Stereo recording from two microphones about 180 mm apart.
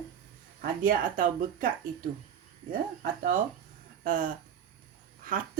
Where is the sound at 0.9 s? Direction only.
50° right (ahead or behind).